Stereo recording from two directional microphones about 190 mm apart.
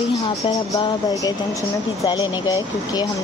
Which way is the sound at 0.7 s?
20° left (ahead or behind).